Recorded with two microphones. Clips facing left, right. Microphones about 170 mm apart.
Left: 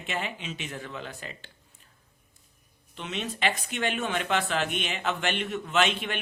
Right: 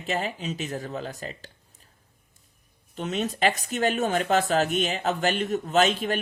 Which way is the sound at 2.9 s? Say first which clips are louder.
Right 6 dB; 40° right (ahead or behind).